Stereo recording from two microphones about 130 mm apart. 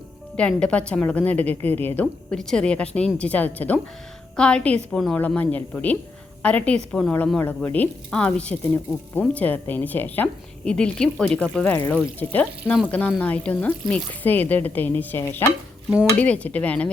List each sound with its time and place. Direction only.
0.3 s a woman's voice: 10° left (ahead or behind)